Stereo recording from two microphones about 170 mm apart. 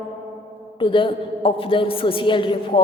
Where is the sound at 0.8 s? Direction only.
30° left (ahead or behind).